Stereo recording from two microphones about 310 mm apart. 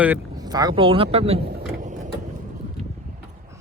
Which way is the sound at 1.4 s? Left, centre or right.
Right.